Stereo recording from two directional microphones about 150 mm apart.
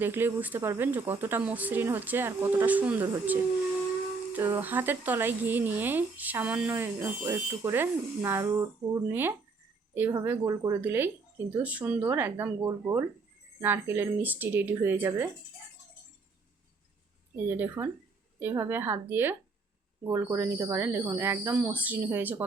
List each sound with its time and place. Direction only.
0.0 s speech: 15° right (ahead or behind)
4.4 s speech: 15° right (ahead or behind)
17.3 s speech: 15° right (ahead or behind)